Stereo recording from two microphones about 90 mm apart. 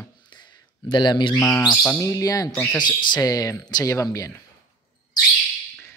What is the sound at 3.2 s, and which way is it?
Speech, 40° left (ahead or behind).